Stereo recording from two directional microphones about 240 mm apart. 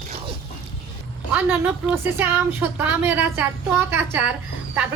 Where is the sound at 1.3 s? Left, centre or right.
Centre.